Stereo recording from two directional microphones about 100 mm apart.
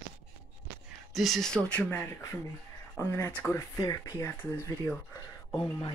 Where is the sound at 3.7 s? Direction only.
35° left (ahead or behind).